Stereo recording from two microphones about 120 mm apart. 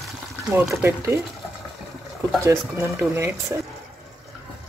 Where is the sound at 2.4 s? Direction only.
25° right (ahead or behind).